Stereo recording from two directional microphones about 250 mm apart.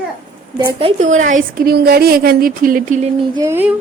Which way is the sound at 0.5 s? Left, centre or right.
Centre.